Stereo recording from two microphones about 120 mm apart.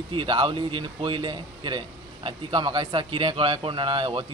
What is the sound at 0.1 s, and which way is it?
A man's voice, 40° right (ahead or behind).